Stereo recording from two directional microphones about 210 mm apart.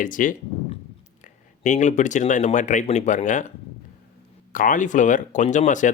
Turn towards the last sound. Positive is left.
turn(degrees=35)  # may be behind; listen again after turning